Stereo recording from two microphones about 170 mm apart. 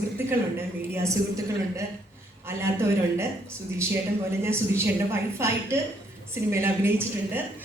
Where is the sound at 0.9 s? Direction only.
15° right (ahead or behind).